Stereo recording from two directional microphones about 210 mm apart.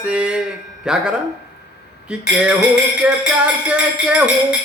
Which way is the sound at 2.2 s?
5° right (ahead or behind).